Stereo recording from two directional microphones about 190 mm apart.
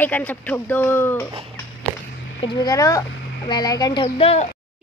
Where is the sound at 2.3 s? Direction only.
25° left (ahead or behind).